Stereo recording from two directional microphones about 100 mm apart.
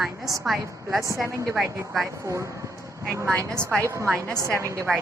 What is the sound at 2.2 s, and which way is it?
A woman's voice, 30° right (ahead or behind).